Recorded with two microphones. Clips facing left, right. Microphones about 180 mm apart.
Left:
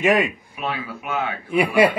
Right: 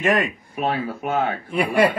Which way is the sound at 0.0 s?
5° left (ahead or behind).